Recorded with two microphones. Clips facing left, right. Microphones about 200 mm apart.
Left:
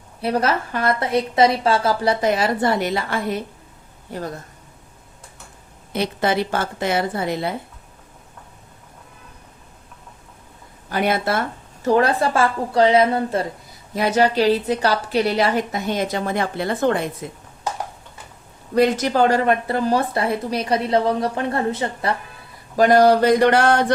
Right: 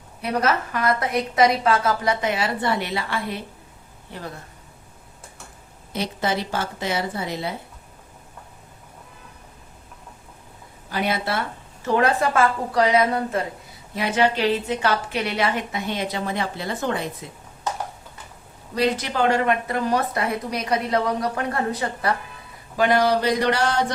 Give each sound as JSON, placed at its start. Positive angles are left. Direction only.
{"t": 0.2, "sound": "a woman's voice", "side_deg": 30}
{"t": 4.1, "sound": "mantra", "side_deg": 45}
{"t": 5.9, "sound": "a woman's voice", "side_deg": 60}
{"t": 10.8, "sound": "a woman's voice", "side_deg": 50}
{"t": 13.9, "sound": "a woman's voice", "side_deg": 40}
{"t": 17.2, "sound": "mantra", "side_deg": 55}
{"t": 18.7, "sound": "speech", "side_deg": 45}
{"t": 22.8, "sound": "mantra", "side_deg": 45}